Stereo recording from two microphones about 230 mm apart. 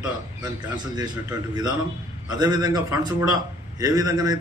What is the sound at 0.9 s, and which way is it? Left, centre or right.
A man's voice, centre.